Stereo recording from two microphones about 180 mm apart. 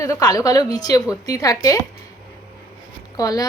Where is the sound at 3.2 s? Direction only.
20° left (ahead or behind).